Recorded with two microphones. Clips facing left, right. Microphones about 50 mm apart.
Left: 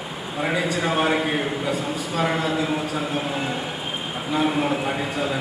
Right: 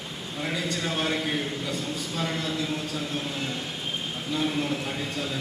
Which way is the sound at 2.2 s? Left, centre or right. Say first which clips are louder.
Left 8 dB; left.